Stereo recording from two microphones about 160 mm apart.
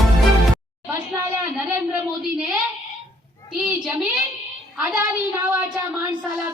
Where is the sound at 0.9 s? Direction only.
15° right (ahead or behind).